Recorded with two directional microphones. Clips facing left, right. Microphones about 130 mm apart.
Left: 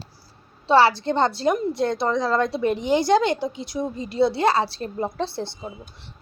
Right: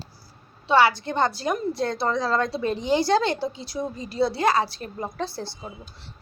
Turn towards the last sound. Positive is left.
turn(degrees=25)  # may be behind; listen again after turning